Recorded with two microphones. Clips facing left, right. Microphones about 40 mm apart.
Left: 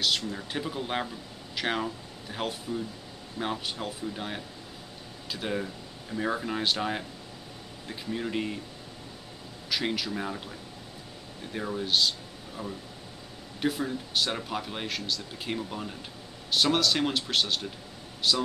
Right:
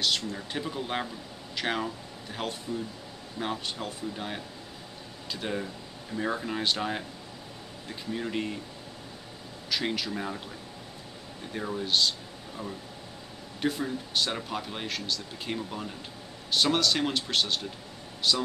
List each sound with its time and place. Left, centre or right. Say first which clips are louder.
0.3 s speech: left 1 dB; centre
9.7 s speech: even; centre
11.5 s speech: even; centre
13.6 s speech: even; centre